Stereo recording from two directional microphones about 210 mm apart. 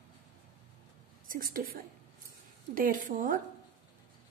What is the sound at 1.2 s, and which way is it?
A woman's voice, 40° right (ahead or behind).